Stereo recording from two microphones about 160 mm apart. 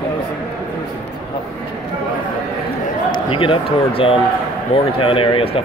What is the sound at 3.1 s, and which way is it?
Speech, 35° left (ahead or behind).